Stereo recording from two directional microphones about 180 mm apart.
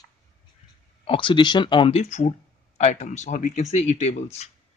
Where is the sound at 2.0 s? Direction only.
40° left (ahead or behind).